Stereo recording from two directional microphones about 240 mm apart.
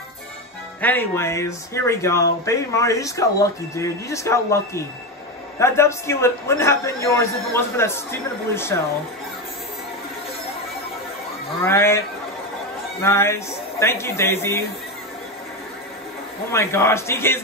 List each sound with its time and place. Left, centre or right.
0.7 s speech: centre
11.6 s speech: centre
13.0 s speech: centre
16.5 s speech: centre